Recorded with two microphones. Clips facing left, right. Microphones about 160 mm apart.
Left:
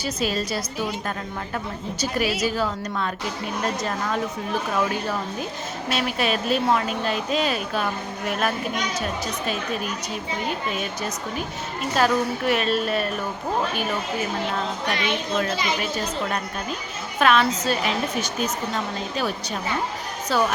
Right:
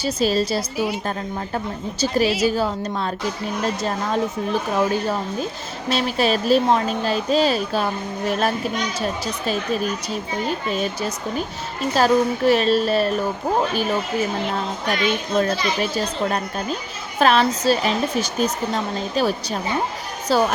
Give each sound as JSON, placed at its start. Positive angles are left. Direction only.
{"t": 0.0, "sound": "a woman's voice", "side_deg": -30}
{"t": 11.9, "sound": "a woman's voice", "side_deg": -35}
{"t": 17.2, "sound": "a woman's voice", "side_deg": -35}
{"t": 20.3, "sound": "a woman's voice", "side_deg": -35}